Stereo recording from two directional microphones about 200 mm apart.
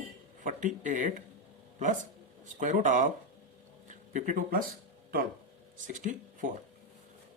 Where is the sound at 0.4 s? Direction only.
40° right (ahead or behind).